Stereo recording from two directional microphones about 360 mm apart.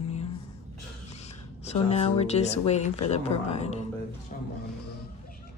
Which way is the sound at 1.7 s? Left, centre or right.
Centre.